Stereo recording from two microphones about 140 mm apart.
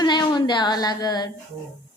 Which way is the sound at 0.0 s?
30° left (ahead or behind).